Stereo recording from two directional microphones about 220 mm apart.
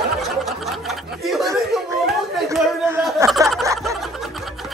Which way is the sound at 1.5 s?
Centre (ahead or behind).